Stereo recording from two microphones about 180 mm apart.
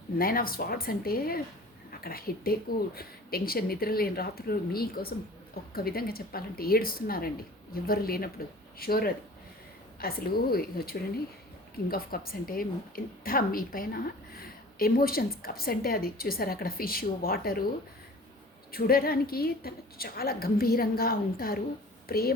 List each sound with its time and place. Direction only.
0.2 s a woman's voice: 55° left (ahead or behind)
18.7 s a woman's voice: 55° left (ahead or behind)